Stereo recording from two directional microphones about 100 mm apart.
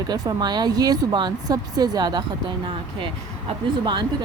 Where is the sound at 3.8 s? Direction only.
50° right (ahead or behind).